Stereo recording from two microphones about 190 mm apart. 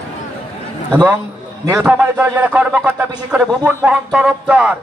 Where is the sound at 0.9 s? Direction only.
10° right (ahead or behind).